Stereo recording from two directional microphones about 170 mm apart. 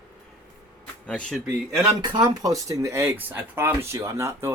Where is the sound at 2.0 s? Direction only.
25° right (ahead or behind).